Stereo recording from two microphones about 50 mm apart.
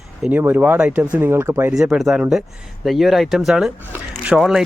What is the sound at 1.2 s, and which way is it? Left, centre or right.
Speech, right.